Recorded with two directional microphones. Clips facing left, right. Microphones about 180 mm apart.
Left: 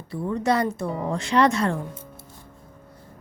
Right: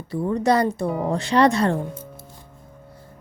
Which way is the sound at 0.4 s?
35° right (ahead or behind).